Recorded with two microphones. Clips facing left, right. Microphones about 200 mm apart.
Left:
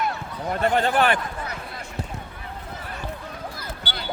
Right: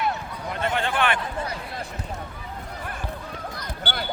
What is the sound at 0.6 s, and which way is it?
Speech, 40° left (ahead or behind).